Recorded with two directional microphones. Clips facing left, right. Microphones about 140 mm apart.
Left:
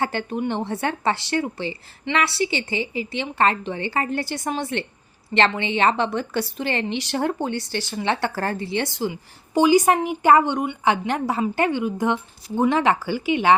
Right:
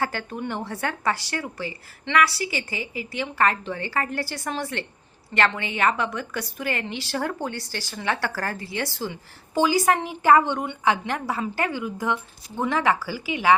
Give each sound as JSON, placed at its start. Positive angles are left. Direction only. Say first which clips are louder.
{"t": 0.0, "sound": "a woman's voice", "louder": "left 4 dB", "side_deg": 20}